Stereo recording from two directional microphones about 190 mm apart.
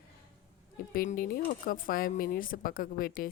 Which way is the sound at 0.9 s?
45° left (ahead or behind).